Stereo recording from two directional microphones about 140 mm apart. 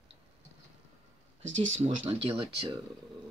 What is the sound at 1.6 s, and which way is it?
Speech, 45° right (ahead or behind).